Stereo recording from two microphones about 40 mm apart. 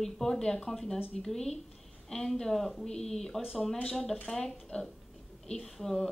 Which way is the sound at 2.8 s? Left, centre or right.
Centre.